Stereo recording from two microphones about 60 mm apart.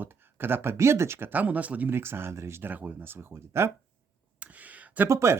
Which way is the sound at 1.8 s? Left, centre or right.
Right.